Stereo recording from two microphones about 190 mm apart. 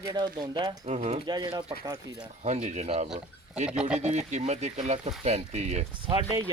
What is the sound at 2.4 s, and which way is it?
Speech, 35° right (ahead or behind).